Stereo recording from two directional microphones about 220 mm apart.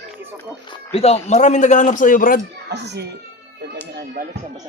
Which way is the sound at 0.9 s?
30° left (ahead or behind).